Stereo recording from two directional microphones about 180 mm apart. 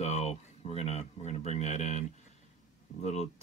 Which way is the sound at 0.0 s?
35° left (ahead or behind).